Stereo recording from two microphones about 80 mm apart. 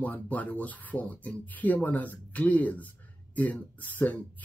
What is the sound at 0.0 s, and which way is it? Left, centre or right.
Speech, centre.